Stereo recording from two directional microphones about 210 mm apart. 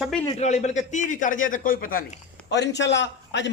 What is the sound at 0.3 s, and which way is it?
A man's voice, 35° left (ahead or behind).